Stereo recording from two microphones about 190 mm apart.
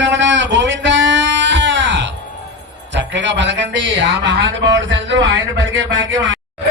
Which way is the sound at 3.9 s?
75° right (ahead or behind).